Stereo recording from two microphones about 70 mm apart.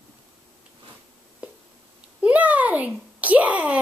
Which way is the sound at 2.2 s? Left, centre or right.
Right.